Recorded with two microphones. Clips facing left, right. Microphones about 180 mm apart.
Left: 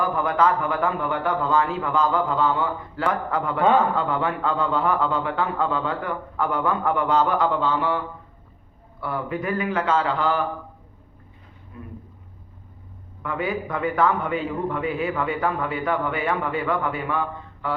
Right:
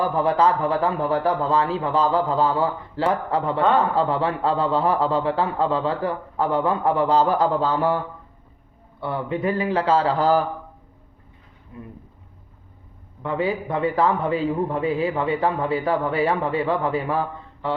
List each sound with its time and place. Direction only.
0.0 s a man's voice: 30° right (ahead or behind)
9.0 s a man's voice: 25° right (ahead or behind)
13.2 s a man's voice: 30° right (ahead or behind)